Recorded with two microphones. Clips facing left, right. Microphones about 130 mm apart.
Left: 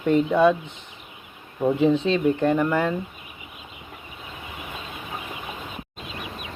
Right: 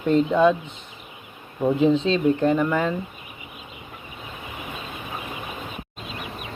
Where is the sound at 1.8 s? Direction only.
15° left (ahead or behind).